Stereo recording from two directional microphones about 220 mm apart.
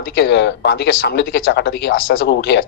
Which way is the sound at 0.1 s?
50° left (ahead or behind).